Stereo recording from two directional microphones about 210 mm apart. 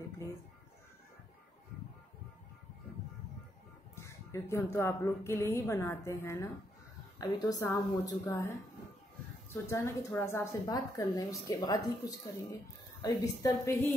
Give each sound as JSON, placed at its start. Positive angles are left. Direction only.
{"t": 3.9, "sound": "speech", "side_deg": 15}
{"t": 9.5, "sound": "speech", "side_deg": 15}